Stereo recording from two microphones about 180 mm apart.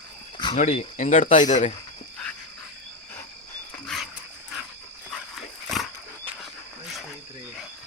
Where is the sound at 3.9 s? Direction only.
Centre (ahead or behind).